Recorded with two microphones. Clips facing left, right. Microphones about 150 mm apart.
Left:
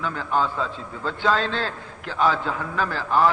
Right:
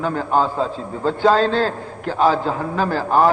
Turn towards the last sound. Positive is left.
turn(degrees=-40)  # may be behind; listen again after turning